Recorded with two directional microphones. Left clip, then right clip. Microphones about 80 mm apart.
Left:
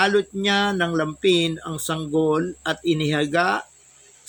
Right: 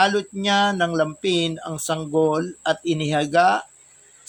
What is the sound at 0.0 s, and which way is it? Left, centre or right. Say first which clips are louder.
Speech: even; centre.